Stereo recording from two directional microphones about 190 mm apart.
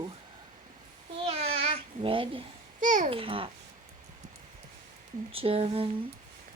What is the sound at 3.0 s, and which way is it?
Speech, 30° right (ahead or behind).